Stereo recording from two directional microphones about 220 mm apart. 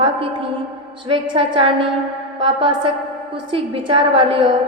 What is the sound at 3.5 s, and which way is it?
A woman's voice, 25° right (ahead or behind).